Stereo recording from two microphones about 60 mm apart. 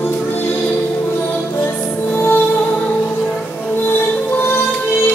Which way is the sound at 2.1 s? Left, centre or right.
Left.